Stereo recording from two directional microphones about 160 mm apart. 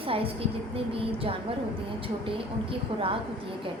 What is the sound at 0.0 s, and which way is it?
Speech, 35° right (ahead or behind).